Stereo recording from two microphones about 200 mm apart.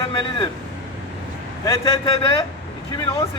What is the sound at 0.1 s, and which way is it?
Speech, 25° left (ahead or behind).